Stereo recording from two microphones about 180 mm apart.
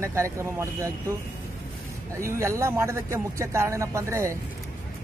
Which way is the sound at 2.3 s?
15° right (ahead or behind).